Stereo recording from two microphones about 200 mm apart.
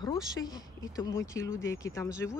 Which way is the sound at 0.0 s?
20° left (ahead or behind).